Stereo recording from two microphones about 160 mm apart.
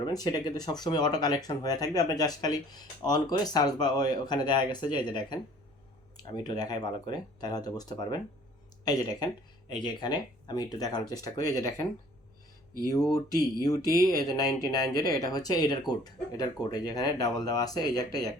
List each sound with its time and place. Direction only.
0.0 s speech: 25° left (ahead or behind)
13.3 s speech: 20° left (ahead or behind)